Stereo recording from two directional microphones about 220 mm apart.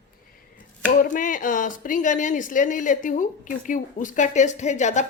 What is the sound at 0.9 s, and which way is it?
A woman's voice, 40° left (ahead or behind).